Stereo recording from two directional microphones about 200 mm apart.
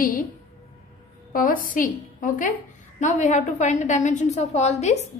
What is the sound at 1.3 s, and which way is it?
A woman's voice, 45° left (ahead or behind).